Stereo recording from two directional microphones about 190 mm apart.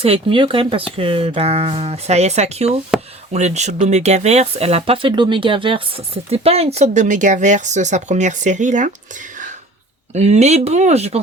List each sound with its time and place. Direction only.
0.0 s speech: 30° right (ahead or behind)
10.2 s speech: 35° right (ahead or behind)